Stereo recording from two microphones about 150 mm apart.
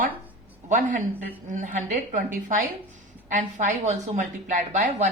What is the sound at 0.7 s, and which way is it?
A woman's voice, 55° right (ahead or behind).